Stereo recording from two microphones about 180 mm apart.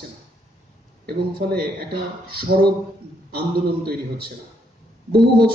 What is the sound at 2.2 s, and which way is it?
A man's voice, 55° right (ahead or behind).